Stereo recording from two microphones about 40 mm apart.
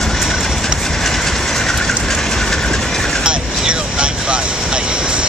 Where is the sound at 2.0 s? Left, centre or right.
Centre.